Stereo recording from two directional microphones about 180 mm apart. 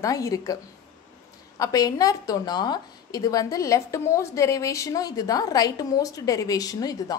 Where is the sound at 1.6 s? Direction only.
20° left (ahead or behind).